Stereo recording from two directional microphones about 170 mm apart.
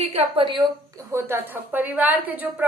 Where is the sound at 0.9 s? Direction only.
15° right (ahead or behind).